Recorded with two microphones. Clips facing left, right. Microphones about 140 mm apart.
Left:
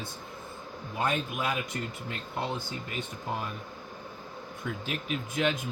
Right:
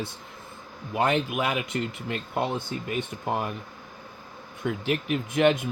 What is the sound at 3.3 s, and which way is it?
Speech, 60° right (ahead or behind).